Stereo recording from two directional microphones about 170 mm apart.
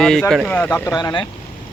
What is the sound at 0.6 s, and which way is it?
Speech, 15° left (ahead or behind).